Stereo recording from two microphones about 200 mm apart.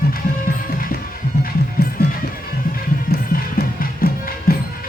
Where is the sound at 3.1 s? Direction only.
50° left (ahead or behind).